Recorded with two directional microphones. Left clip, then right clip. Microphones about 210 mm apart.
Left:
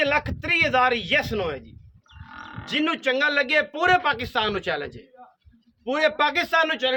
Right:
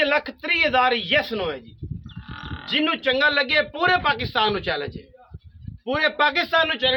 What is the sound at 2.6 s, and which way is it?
A man's voice, 10° left (ahead or behind).